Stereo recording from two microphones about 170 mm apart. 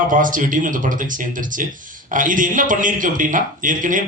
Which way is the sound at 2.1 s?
50° right (ahead or behind).